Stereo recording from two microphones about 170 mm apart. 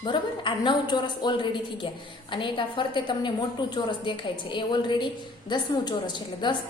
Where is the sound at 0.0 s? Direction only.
30° left (ahead or behind).